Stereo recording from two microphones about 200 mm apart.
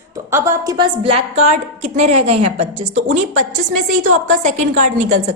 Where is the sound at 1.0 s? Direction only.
30° right (ahead or behind).